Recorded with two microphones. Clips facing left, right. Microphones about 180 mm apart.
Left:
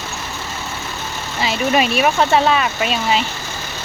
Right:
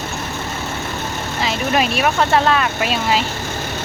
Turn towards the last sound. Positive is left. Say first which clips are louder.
# even
turn(degrees=0)  # may be behind; listen again after turning